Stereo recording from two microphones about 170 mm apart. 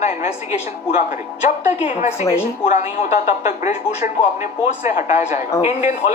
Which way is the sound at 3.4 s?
45° left (ahead or behind).